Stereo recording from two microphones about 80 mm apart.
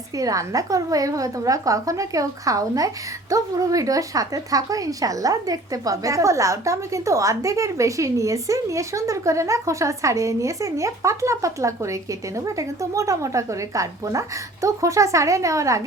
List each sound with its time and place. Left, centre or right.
0.2 s a woman's voice: right